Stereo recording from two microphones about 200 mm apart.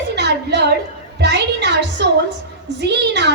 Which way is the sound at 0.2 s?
55° right (ahead or behind).